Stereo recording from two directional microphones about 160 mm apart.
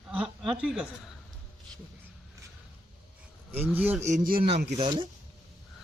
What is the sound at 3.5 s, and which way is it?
Speech, 10° right (ahead or behind).